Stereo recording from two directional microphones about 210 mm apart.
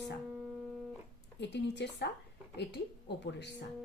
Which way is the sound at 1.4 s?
55° left (ahead or behind).